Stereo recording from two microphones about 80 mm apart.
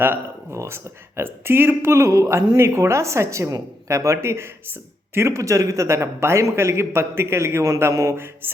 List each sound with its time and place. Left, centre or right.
0.0 s a man's voice: right
8.4 s music: right